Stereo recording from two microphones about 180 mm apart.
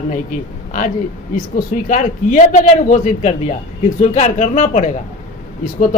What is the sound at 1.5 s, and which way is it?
Speech, 45° left (ahead or behind).